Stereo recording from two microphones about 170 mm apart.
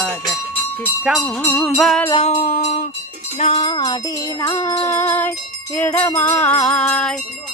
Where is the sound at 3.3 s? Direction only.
35° left (ahead or behind).